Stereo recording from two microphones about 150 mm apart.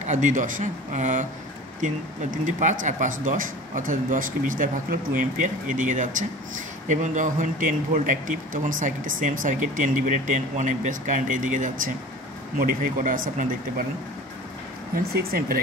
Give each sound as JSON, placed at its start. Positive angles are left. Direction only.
{"t": 0.0, "sound": "speech", "side_deg": -55}
{"t": 2.3, "sound": "speech", "side_deg": -60}
{"t": 15.1, "sound": "speech", "side_deg": -80}